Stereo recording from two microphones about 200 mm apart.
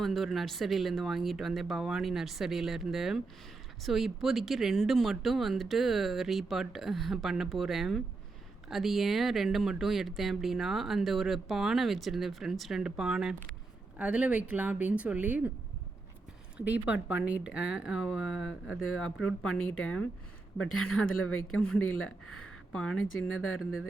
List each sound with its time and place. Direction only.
0.0 s a woman's voice: centre (ahead or behind)
16.6 s a woman's voice: 5° right (ahead or behind)
21.2 s speech: 90° left
22.7 s speech: 5° left (ahead or behind)
23.0 s speech: 90° left